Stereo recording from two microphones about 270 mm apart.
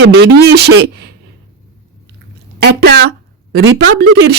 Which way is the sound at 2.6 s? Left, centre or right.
Right.